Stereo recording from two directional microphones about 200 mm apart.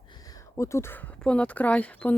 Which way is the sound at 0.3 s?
15° left (ahead or behind).